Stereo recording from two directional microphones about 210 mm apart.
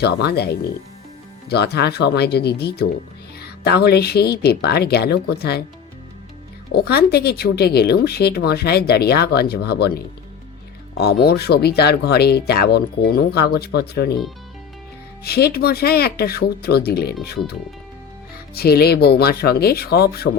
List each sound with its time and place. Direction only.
0.0 s speech: 50° left (ahead or behind)
6.7 s speech: 50° left (ahead or behind)
15.2 s speech: 50° left (ahead or behind)